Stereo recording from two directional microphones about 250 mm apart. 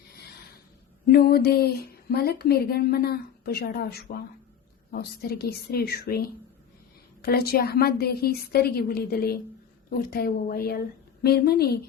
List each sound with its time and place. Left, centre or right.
1.1 s speech: left